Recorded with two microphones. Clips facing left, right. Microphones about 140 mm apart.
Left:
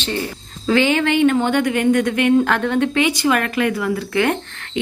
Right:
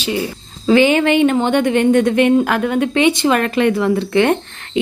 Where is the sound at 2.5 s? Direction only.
10° right (ahead or behind).